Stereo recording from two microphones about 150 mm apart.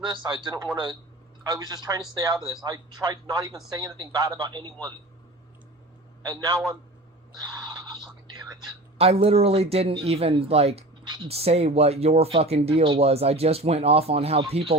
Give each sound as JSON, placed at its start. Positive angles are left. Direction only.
{"t": 0.0, "sound": "speech", "side_deg": -35}
{"t": 6.2, "sound": "speech", "side_deg": -25}
{"t": 7.3, "sound": "a sound", "side_deg": -30}
{"t": 9.0, "sound": "speech", "side_deg": -40}
{"t": 11.0, "sound": "speech", "side_deg": -30}
{"t": 11.3, "sound": "speech", "side_deg": -40}